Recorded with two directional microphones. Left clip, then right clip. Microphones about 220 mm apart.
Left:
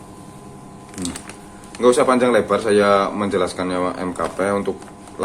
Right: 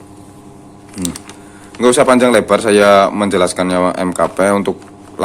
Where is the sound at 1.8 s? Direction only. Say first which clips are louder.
Right 5 dB; 45° right (ahead or behind).